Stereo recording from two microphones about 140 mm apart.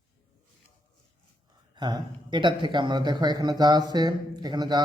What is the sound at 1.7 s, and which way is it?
Speech, 30° right (ahead or behind).